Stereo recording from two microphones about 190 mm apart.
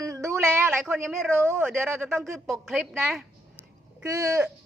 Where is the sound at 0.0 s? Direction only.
15° right (ahead or behind).